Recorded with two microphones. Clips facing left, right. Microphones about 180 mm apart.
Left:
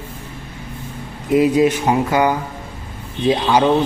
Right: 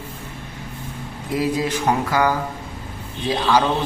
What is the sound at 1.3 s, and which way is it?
A man's voice, 20° left (ahead or behind).